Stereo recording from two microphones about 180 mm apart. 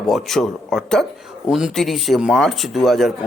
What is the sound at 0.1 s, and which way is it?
Speech, centre (ahead or behind).